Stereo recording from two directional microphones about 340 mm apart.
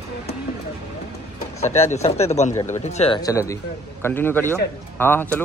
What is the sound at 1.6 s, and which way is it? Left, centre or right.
A man's voice, centre.